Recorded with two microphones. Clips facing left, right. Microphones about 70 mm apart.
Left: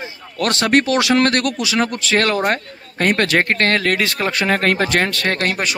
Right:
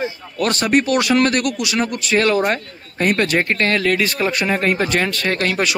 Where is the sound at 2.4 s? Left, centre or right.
Left.